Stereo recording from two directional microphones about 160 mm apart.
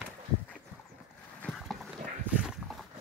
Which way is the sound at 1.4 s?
5° left (ahead or behind).